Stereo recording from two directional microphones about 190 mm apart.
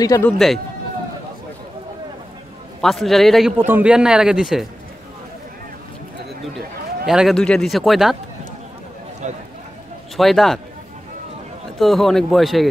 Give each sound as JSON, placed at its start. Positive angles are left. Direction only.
{"t": 0.0, "sound": "speech", "side_deg": 15}
{"t": 2.8, "sound": "a man's voice", "side_deg": 0}
{"t": 3.5, "sound": "a man's voice", "side_deg": -10}
{"t": 7.1, "sound": "a man's voice", "side_deg": 0}
{"t": 9.2, "sound": "speech", "side_deg": -40}
{"t": 10.1, "sound": "a man's voice", "side_deg": 0}
{"t": 11.8, "sound": "a man's voice", "side_deg": 0}